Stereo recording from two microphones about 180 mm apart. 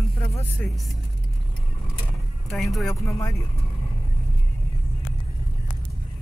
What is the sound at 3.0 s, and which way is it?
Speech, 15° left (ahead or behind).